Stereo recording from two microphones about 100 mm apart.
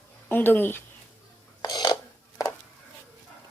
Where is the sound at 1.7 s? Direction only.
45° left (ahead or behind).